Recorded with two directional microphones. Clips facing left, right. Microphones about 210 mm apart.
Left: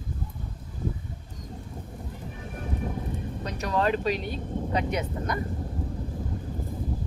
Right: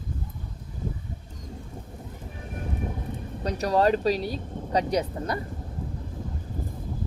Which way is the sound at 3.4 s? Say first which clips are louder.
Right 5 dB; 35° right (ahead or behind).